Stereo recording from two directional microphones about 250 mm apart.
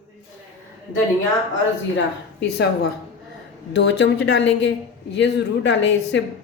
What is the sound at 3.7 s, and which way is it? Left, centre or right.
Speech, left.